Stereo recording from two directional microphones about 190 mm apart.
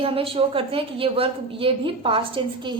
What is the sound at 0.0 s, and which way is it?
A woman's voice, 30° right (ahead or behind).